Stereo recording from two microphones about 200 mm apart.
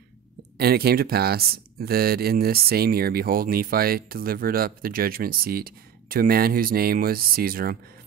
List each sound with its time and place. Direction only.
0.6 s speech: 50° right (ahead or behind)